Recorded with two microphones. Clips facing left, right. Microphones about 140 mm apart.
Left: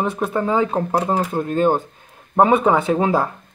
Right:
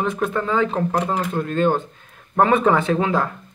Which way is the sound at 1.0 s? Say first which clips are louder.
Left 3 dB; 35° left (ahead or behind).